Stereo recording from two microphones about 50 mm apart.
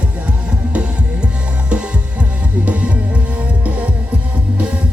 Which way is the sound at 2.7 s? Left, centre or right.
Right.